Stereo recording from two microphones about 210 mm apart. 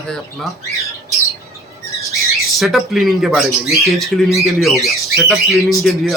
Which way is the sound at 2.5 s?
Centre (ahead or behind).